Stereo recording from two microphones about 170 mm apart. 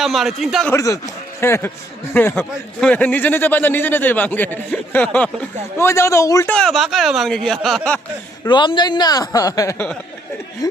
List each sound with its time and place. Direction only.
0.0 s speech: centre (ahead or behind)
0.7 s a man's voice: 20° left (ahead or behind)
6.5 s speech: 5° left (ahead or behind)
8.4 s a man's voice: 25° left (ahead or behind)